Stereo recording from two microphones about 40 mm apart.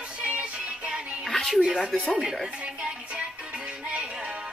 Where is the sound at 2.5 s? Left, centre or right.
Right.